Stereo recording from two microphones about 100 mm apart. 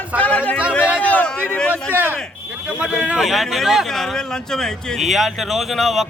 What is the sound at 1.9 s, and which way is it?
Speech, 20° right (ahead or behind).